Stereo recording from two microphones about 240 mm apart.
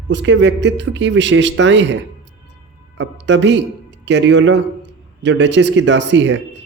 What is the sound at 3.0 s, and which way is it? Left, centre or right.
A man's voice, right.